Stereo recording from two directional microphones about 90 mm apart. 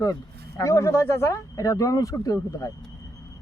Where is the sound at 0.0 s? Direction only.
40° left (ahead or behind).